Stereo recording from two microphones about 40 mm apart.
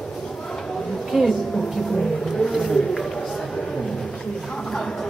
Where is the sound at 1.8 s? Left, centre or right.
Centre.